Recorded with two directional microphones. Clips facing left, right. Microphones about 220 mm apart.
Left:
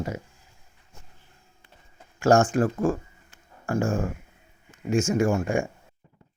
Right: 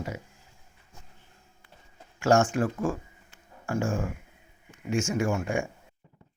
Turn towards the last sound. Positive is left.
turn(degrees=40)  # may be behind; listen again after turning